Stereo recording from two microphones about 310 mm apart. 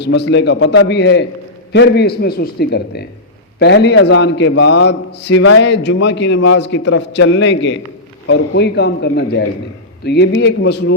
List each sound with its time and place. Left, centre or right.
0.0 s a man's voice: left